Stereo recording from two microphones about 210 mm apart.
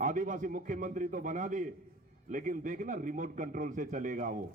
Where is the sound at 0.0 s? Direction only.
35° right (ahead or behind).